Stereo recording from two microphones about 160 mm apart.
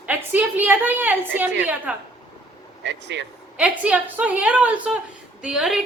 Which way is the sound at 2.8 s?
90° right.